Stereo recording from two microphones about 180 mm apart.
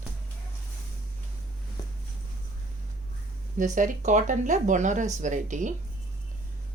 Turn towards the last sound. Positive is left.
turn(degrees=-45)  # may be behind; listen again after turning